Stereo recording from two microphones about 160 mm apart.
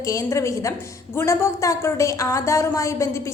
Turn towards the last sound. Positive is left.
turn(degrees=20)  # may be behind; listen again after turning